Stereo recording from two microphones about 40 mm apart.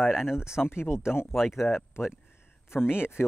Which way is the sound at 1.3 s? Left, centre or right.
Centre.